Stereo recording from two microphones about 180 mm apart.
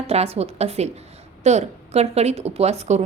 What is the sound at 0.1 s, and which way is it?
A woman's voice, 35° right (ahead or behind).